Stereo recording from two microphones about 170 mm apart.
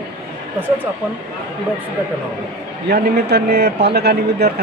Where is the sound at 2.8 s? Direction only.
75° right (ahead or behind).